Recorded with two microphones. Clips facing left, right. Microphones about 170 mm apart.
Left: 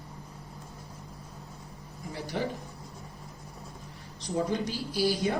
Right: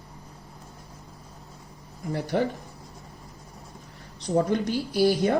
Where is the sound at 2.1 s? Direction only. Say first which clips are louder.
Right 8 dB; 60° right (ahead or behind).